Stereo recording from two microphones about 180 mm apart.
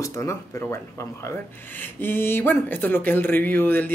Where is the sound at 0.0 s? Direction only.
15° left (ahead or behind).